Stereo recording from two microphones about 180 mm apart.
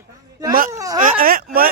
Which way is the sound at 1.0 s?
55° right (ahead or behind).